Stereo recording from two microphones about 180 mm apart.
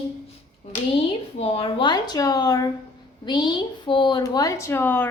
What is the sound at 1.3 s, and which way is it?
A woman's voice, 35° left (ahead or behind).